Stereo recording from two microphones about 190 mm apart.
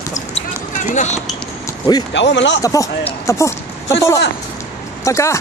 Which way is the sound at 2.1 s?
70° left (ahead or behind).